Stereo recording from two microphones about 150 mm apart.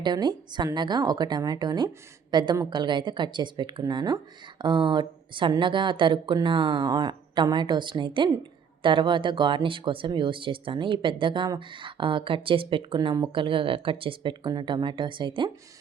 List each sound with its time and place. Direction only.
0.0 s a woman's voice: 30° right (ahead or behind)